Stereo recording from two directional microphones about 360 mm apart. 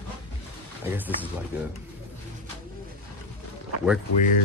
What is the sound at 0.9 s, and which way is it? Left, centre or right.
Speech, centre.